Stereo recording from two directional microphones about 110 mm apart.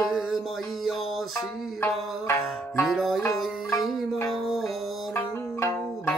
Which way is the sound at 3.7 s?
30° left (ahead or behind).